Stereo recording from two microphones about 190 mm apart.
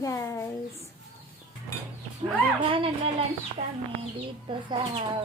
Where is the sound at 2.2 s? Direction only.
25° right (ahead or behind).